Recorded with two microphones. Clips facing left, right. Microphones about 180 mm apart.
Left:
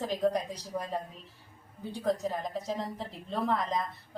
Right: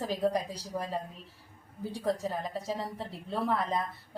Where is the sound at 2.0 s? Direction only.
Centre (ahead or behind).